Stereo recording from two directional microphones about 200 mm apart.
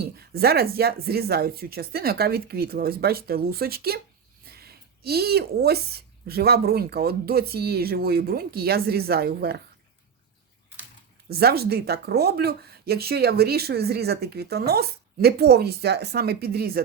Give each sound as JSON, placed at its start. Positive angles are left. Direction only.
{"t": 0.0, "sound": "speech", "side_deg": -50}
{"t": 11.3, "sound": "speech", "side_deg": -50}